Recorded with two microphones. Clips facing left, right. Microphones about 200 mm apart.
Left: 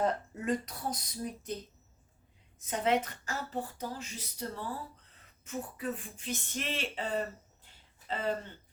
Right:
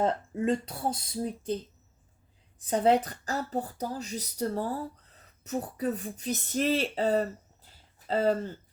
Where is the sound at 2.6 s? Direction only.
35° right (ahead or behind).